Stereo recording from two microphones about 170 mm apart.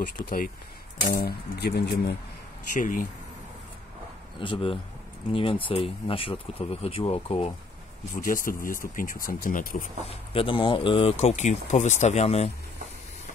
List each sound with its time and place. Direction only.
0.2 s speech: 60° left (ahead or behind); by 2.1 s 75° left (ahead or behind)
2.8 s speech: 50° left (ahead or behind)
4.4 s speech: 30° left (ahead or behind)
8.2 s speech: 55° left (ahead or behind)
10.0 s speech: 35° left (ahead or behind)